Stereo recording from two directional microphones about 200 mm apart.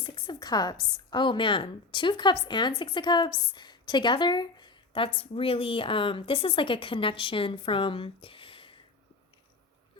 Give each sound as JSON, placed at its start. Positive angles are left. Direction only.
{"t": 0.0, "sound": "a woman's voice", "side_deg": 25}